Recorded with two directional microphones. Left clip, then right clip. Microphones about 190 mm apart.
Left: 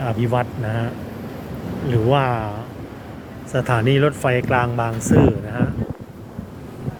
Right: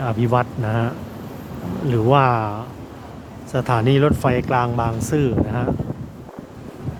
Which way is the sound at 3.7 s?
20° right (ahead or behind).